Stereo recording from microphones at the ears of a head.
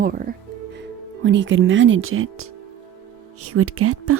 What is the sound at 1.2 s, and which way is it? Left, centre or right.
Speech, right.